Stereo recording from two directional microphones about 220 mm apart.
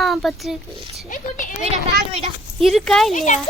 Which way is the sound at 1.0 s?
35° left (ahead or behind).